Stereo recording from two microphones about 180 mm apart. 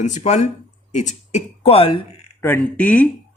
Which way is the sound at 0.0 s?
40° left (ahead or behind).